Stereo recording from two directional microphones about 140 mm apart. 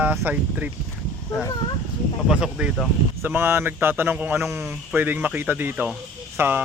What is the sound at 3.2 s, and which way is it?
Speech, 15° right (ahead or behind).